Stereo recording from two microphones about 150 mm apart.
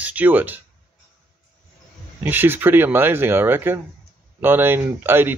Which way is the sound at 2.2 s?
15° right (ahead or behind).